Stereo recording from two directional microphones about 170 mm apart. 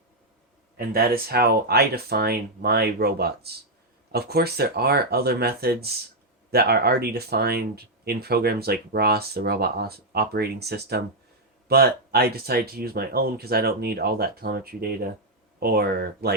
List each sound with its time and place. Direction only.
0.9 s speech: 65° right (ahead or behind)